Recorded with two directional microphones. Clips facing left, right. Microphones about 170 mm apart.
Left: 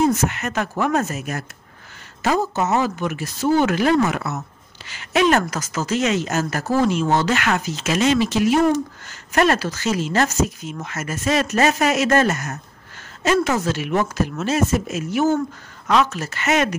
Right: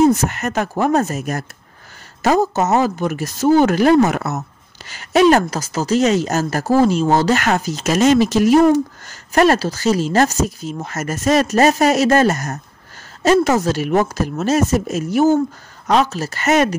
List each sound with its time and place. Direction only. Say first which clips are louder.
0.1 s speech: right 3 dB; 40° right (ahead or behind)